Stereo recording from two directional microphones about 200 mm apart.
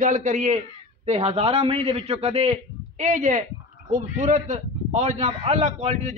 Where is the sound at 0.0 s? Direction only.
40° right (ahead or behind).